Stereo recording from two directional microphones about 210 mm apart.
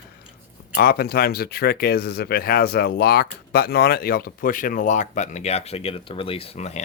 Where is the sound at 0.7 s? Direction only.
45° left (ahead or behind).